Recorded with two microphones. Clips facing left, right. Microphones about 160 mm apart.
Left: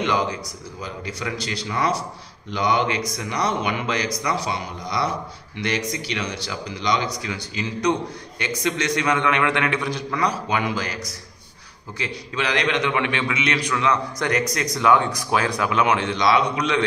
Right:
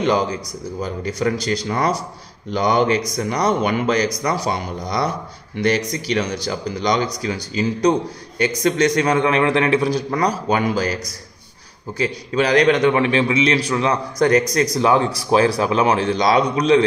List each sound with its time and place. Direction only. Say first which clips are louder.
0.0 s a man's voice: right 4 dB; 40° right (ahead or behind)
12.0 s a man's voice: right 8 dB; 40° right (ahead or behind)